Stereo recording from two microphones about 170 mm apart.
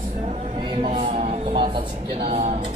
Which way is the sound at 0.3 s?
30° right (ahead or behind).